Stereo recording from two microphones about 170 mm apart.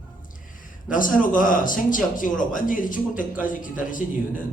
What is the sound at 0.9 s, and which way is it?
A man's voice, 50° left (ahead or behind).